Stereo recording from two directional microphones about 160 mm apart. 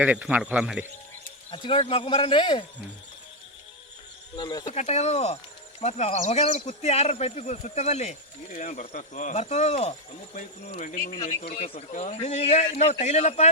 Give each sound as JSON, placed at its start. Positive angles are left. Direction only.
{"t": 0.0, "sound": "speech", "side_deg": -10}
{"t": 1.5, "sound": "speech", "side_deg": 35}
{"t": 4.4, "sound": "speech", "side_deg": 25}
{"t": 4.7, "sound": "speech", "side_deg": 45}
{"t": 11.1, "sound": "speech", "side_deg": 25}
{"t": 11.5, "sound": "speech", "side_deg": 40}